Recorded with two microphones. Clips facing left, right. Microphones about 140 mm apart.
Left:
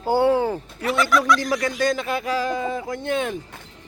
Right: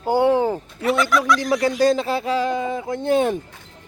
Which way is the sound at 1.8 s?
30° right (ahead or behind).